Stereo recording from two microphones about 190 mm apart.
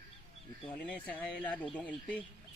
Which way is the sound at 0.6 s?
5° left (ahead or behind).